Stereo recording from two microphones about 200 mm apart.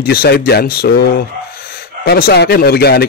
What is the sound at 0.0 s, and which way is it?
Speech, 50° left (ahead or behind).